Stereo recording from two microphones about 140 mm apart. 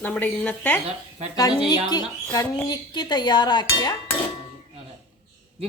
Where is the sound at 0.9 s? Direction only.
45° right (ahead or behind).